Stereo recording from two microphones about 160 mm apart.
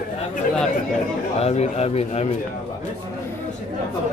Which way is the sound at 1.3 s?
40° left (ahead or behind).